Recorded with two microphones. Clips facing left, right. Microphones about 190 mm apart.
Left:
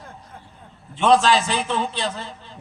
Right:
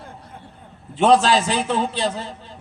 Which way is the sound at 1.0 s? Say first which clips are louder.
Right 1 dB; 40° right (ahead or behind).